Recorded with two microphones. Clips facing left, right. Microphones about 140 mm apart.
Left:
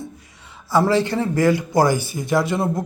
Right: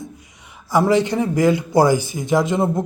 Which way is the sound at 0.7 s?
15° right (ahead or behind).